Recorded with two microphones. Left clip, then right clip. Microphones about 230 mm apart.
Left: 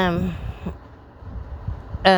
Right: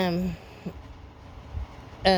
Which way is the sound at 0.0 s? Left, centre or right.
Centre.